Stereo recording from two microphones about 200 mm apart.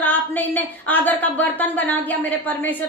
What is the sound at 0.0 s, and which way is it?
A woman's voice, 10° left (ahead or behind).